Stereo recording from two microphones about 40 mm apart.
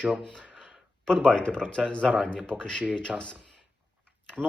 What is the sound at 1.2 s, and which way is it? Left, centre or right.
Speech, left.